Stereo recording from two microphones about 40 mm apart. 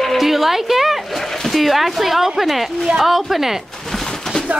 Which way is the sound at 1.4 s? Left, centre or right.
Centre.